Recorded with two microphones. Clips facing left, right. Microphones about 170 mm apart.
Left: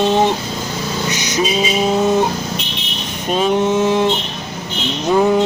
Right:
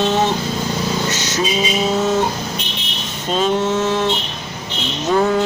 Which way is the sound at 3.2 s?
15° left (ahead or behind).